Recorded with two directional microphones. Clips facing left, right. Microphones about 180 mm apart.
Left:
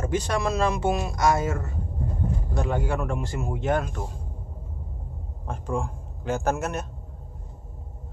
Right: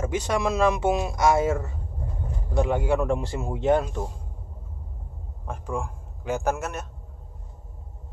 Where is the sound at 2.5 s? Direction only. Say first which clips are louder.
Right 5 dB; 20° right (ahead or behind).